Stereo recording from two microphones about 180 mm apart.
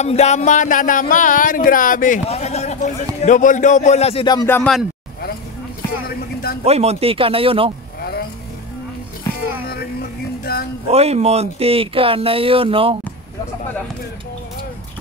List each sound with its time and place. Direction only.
0.0 s speech: 40° left (ahead or behind)
3.2 s music: 45° left (ahead or behind); by 4.5 s 25° left (ahead or behind)
4.5 s speech: 10° left (ahead or behind)
6.6 s speech: 35° right (ahead or behind)
8.0 s vehicle: 60° left (ahead or behind)
10.4 s speech: 60° left (ahead or behind)
10.9 s speech: 35° right (ahead or behind)